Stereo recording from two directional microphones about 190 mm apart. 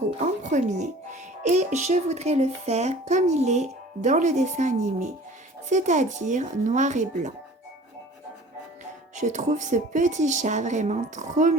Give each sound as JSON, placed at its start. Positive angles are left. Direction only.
{"t": 0.5, "sound": "speech", "side_deg": -40}
{"t": 9.1, "sound": "speech", "side_deg": -40}